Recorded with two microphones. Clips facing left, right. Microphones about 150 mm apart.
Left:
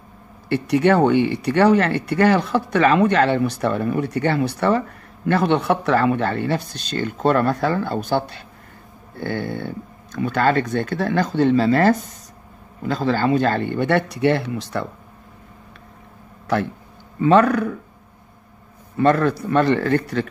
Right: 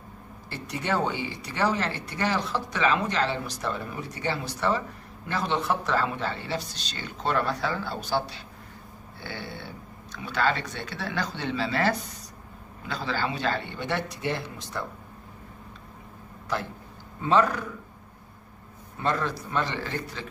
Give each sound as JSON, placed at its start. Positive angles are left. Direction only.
{"t": 0.5, "sound": "speech", "side_deg": 70}
{"t": 16.5, "sound": "speech", "side_deg": 65}
{"t": 18.9, "sound": "speech", "side_deg": 60}